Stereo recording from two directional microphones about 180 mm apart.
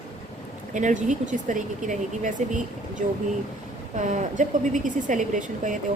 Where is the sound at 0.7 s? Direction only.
45° right (ahead or behind).